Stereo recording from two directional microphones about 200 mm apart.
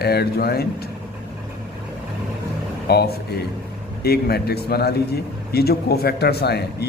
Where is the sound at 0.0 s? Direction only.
55° left (ahead or behind).